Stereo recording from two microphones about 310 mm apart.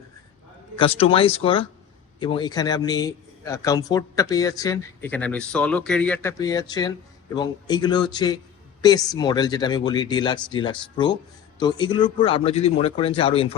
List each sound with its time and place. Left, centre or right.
0.8 s a man's voice: centre